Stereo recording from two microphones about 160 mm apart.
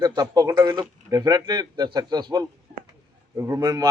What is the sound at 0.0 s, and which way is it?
Speech, 25° right (ahead or behind).